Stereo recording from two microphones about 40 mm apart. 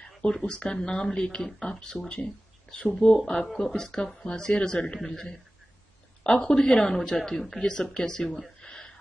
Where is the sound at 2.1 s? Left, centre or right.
Left.